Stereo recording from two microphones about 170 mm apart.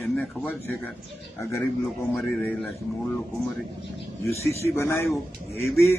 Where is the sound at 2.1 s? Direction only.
Centre (ahead or behind).